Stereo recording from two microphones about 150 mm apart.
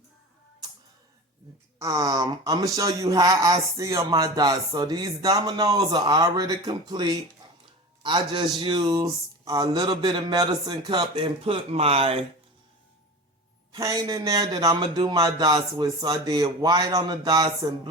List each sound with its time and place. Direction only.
1.8 s speech: 20° right (ahead or behind); by 12.2 s 40° right (ahead or behind)
13.7 s speech: 25° right (ahead or behind)